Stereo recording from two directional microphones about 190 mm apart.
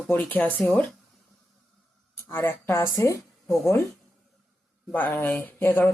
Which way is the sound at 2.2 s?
10° left (ahead or behind).